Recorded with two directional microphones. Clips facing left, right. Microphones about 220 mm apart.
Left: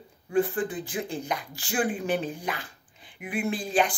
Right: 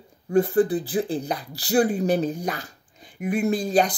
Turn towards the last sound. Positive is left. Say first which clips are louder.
# right 5 dB
turn(degrees=-40)  # may be behind; listen again after turning